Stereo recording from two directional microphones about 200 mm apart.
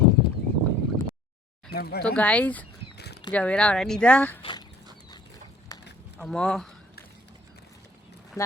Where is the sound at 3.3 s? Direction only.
5° left (ahead or behind).